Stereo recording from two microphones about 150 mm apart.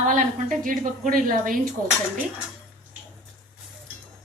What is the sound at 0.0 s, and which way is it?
A woman's voice, 60° right (ahead or behind).